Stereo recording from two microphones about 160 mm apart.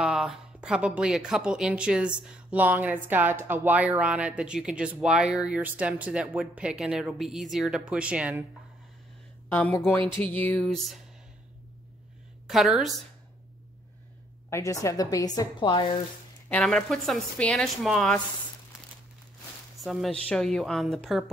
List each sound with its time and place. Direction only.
0.0 s speech: 5° right (ahead or behind)
9.5 s a woman's voice: 15° left (ahead or behind)
12.4 s a woman's voice: centre (ahead or behind)
14.5 s a woman's voice: 20° left (ahead or behind)
16.4 s a woman's voice: 5° left (ahead or behind)
19.8 s a woman's voice: centre (ahead or behind)